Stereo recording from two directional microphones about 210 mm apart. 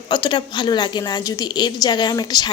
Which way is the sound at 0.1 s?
20° left (ahead or behind).